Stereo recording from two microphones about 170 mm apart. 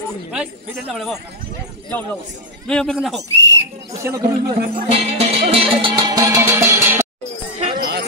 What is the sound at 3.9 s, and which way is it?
Speech, 20° right (ahead or behind).